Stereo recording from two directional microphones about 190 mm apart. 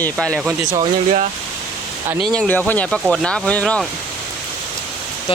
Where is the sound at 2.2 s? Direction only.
5° left (ahead or behind).